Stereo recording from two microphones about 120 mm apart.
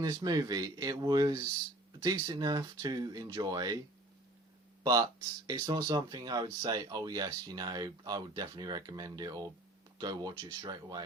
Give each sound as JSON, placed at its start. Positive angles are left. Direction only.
{"t": 0.0, "sound": "speech", "side_deg": -30}
{"t": 2.2, "sound": "speech", "side_deg": -35}
{"t": 4.8, "sound": "speech", "side_deg": -35}